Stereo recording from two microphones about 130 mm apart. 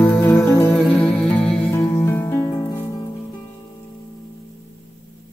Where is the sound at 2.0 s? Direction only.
20° left (ahead or behind).